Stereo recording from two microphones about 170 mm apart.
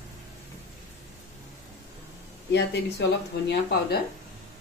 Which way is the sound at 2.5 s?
90° left.